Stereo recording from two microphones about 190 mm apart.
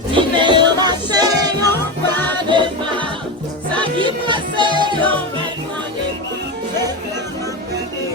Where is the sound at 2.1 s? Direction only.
10° left (ahead or behind).